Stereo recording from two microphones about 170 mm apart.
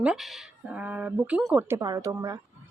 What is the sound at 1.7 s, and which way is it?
Speech, 20° right (ahead or behind).